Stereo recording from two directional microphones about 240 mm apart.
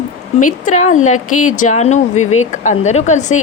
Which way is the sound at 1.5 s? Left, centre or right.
Left.